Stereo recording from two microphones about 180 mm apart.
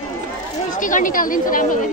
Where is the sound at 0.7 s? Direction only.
45° left (ahead or behind).